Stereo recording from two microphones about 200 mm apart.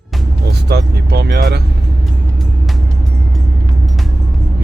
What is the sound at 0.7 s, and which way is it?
Speech, 55° right (ahead or behind).